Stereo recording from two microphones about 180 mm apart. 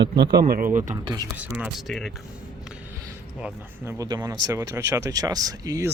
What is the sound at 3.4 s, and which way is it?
Speech, 10° right (ahead or behind).